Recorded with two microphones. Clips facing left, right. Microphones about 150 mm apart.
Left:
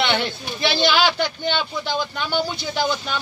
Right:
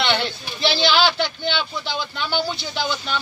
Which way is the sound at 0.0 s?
50° left (ahead or behind).